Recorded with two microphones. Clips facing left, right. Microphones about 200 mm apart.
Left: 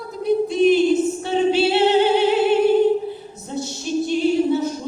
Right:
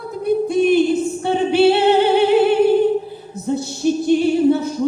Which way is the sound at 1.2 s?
55° right (ahead or behind).